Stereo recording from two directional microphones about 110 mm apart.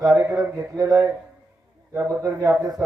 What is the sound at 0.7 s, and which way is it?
A man's voice, 30° right (ahead or behind).